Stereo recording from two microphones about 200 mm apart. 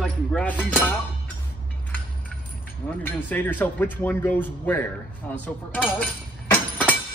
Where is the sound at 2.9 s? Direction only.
10° left (ahead or behind).